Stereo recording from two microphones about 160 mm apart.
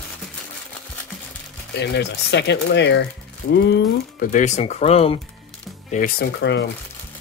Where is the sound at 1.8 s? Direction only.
90° left.